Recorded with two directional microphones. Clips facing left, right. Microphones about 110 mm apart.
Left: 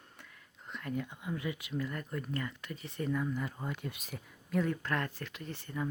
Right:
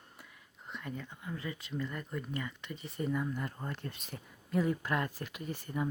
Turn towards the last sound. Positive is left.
turn(degrees=-15)  # may be behind; listen again after turning